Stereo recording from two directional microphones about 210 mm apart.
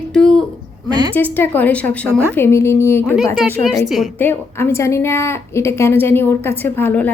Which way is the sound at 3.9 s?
Centre (ahead or behind).